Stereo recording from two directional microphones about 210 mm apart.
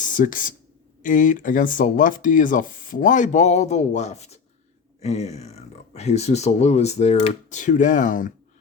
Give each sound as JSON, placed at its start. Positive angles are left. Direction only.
{"t": 0.0, "sound": "speech", "side_deg": 40}